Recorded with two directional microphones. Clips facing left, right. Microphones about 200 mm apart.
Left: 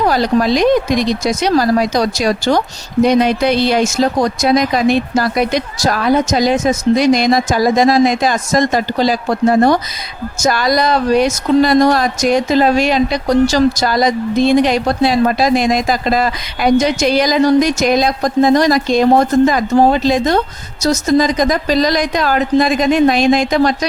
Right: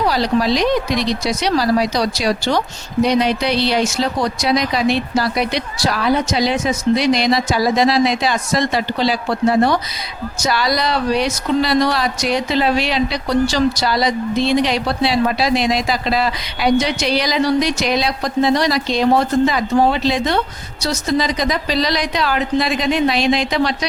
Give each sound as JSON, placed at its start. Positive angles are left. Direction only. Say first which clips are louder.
{"t": 0.0, "sound": "speech", "louder": "left 3 dB", "side_deg": 50}